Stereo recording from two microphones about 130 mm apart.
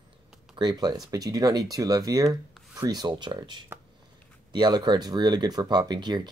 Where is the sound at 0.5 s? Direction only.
30° right (ahead or behind).